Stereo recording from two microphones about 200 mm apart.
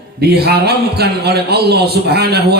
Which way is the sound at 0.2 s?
50° right (ahead or behind).